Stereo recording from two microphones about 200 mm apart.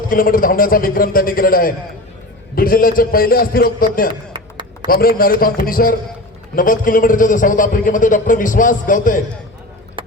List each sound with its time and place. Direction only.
0.1 s a man's voice: 45° left (ahead or behind)
4.1 s a sound: 25° right (ahead or behind)
4.9 s a man's voice: 45° left (ahead or behind)